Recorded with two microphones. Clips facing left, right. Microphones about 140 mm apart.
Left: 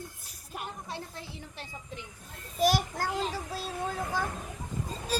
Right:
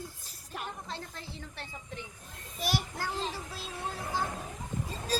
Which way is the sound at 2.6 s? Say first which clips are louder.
Left 7 dB; 45° left (ahead or behind).